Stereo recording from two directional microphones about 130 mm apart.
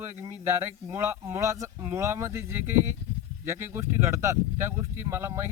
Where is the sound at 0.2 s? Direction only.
20° right (ahead or behind).